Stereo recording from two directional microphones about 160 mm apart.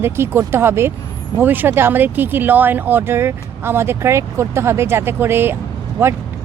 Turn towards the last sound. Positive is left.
turn(degrees=-15)  # may be behind; listen again after turning